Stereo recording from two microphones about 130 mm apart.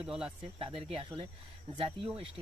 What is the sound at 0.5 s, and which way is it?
Speech, 45° right (ahead or behind).